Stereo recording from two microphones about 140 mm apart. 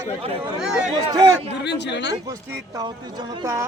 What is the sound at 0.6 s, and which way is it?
Speech, 5° right (ahead or behind).